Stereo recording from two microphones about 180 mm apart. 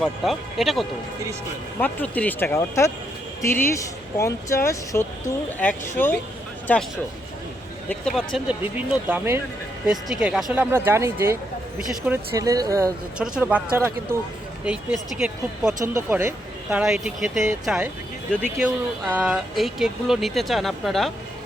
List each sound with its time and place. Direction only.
0.0 s speech: centre (ahead or behind)
8.4 s speech: 10° right (ahead or behind)
13.1 s speech: 5° right (ahead or behind)
15.8 s speech: 15° right (ahead or behind)
18.6 s speech: 5° right (ahead or behind)